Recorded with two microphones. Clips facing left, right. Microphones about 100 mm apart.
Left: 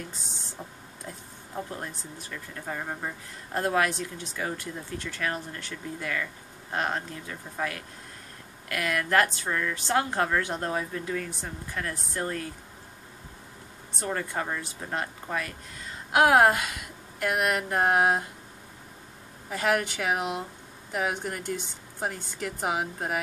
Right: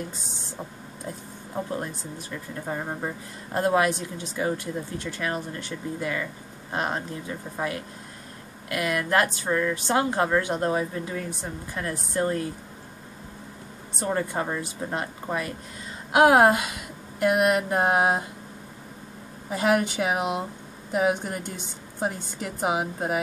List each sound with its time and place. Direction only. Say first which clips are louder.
1.8 s speech: right 5 dB; 20° right (ahead or behind)
13.9 s a woman's voice: right 4 dB; 20° right (ahead or behind)
19.5 s speech: right 4 dB; 20° right (ahead or behind)